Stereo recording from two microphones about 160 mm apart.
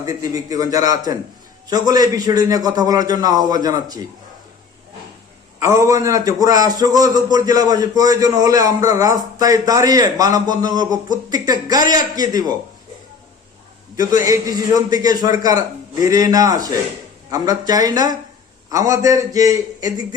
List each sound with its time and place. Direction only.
0.0 s a man's voice: 20° right (ahead or behind)
5.6 s a man's voice: 20° right (ahead or behind)
14.3 s a man's voice: 20° right (ahead or behind)